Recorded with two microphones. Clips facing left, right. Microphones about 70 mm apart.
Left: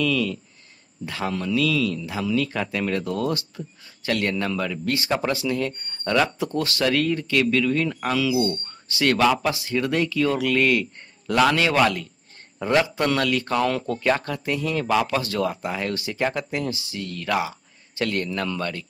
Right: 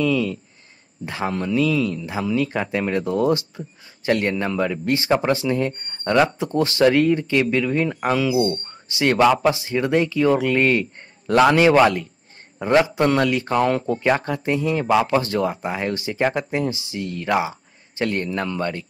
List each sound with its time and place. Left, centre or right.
0.0 s speech: right